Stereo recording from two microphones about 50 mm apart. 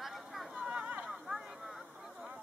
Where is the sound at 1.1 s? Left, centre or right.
Centre.